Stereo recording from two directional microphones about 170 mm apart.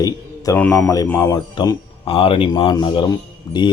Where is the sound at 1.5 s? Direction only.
30° left (ahead or behind).